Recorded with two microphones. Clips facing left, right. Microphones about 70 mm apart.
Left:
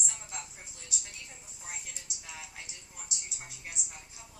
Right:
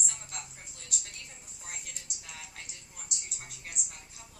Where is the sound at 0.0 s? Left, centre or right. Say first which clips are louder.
Left 1 dB; centre.